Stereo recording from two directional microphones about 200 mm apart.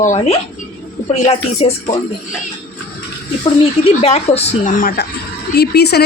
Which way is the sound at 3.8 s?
30° left (ahead or behind).